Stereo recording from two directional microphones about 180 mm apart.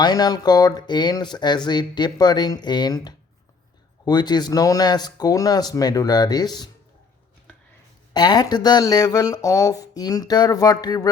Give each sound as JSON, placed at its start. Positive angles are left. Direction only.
{"t": 0.0, "sound": "speech", "side_deg": 25}
{"t": 8.1, "sound": "speech", "side_deg": 20}